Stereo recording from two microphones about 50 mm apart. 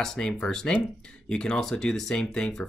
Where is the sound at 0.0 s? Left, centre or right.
Centre.